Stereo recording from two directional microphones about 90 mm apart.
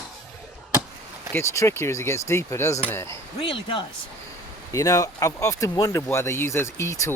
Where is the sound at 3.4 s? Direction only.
75° left (ahead or behind).